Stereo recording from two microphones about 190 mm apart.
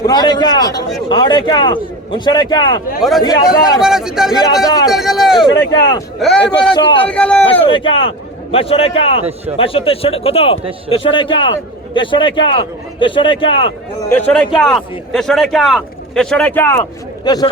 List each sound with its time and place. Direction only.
0.0 s a man's voice: 20° left (ahead or behind)
3.0 s a man's voice: centre (ahead or behind)
4.6 s a man's voice: 20° left (ahead or behind)
4.9 s a man's voice: centre (ahead or behind)
6.7 s a man's voice: 25° left (ahead or behind)
7.1 s a man's voice: 5° left (ahead or behind)
7.7 s a man's voice: 30° left (ahead or behind)
14.1 s a man's voice: 5° left (ahead or behind); by 17.5 s 20° left (ahead or behind)